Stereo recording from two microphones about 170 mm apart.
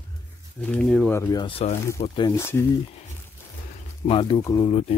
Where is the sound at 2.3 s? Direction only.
15° left (ahead or behind).